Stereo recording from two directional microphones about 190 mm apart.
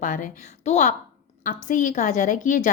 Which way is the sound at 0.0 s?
40° left (ahead or behind).